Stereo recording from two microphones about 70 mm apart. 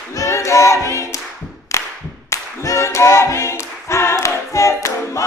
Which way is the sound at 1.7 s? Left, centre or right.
Left.